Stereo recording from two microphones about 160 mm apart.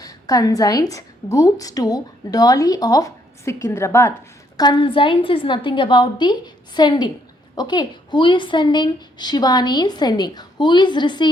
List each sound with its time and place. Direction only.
0.0 s a woman's voice: 20° left (ahead or behind)
4.5 s a woman's voice: 25° left (ahead or behind)